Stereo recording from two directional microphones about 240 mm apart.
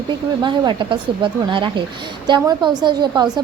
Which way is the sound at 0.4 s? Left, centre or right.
Centre.